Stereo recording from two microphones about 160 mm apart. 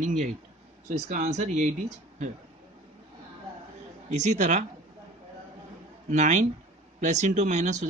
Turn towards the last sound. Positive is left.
turn(degrees=-45)  # may be behind; listen again after turning